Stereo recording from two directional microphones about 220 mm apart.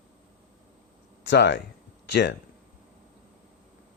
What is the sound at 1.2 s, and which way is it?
Speech, 55° left (ahead or behind).